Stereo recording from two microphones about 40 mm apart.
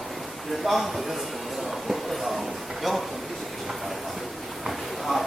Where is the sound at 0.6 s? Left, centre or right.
Centre.